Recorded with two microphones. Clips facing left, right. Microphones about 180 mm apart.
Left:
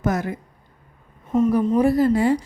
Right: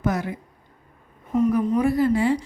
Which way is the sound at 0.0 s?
45° left (ahead or behind).